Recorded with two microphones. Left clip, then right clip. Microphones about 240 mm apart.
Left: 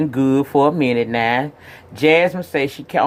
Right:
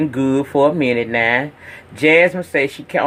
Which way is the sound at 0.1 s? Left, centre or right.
Left.